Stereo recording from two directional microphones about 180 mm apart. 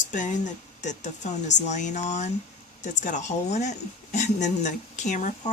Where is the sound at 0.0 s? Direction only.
45° left (ahead or behind).